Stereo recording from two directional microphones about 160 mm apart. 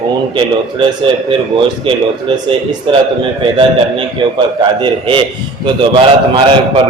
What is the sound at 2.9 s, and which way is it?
Speech, 35° right (ahead or behind).